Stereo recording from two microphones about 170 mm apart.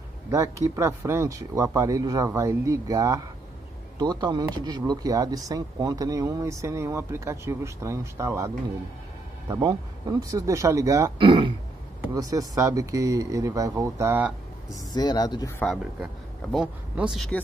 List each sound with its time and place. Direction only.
0.3 s speech: 20° right (ahead or behind)
9.5 s speech: 25° right (ahead or behind)
11.1 s speech: 30° right (ahead or behind); by 14.3 s 15° right (ahead or behind)
14.9 s speech: 25° left (ahead or behind)
15.6 s speech: centre (ahead or behind)